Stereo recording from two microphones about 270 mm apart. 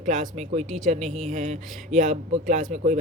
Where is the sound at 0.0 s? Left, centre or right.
Right.